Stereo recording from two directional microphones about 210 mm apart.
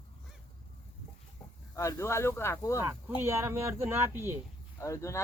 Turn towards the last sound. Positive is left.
turn(degrees=15)  # may be behind; listen again after turning